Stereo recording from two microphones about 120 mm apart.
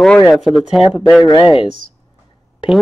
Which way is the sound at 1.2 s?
45° left (ahead or behind).